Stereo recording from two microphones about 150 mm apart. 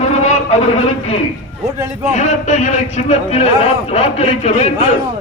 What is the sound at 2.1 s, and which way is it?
A man's voice, 50° left (ahead or behind).